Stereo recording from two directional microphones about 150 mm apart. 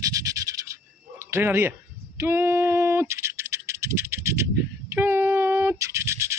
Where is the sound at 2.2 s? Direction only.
15° right (ahead or behind).